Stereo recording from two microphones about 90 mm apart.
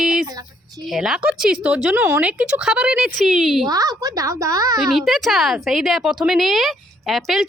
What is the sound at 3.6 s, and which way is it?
A woman's voice, 45° right (ahead or behind).